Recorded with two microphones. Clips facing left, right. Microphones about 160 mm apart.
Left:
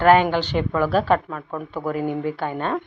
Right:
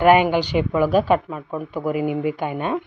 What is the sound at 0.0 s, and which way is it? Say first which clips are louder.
Speech: right 1 dB; 15° right (ahead or behind).